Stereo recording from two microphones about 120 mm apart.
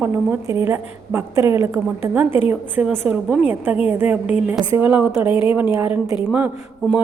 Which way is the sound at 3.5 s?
15° right (ahead or behind).